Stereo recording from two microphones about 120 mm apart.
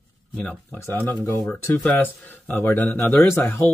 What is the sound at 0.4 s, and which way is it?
Speech, 15° left (ahead or behind).